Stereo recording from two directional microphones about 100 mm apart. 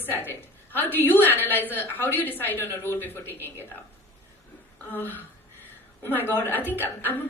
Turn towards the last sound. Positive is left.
turn(degrees=20)  # may be behind; listen again after turning